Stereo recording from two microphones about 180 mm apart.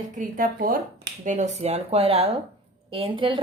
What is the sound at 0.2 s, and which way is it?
A woman's voice, 50° right (ahead or behind).